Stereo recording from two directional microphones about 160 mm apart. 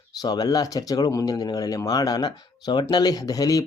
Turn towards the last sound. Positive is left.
turn(degrees=20)  # may be behind; listen again after turning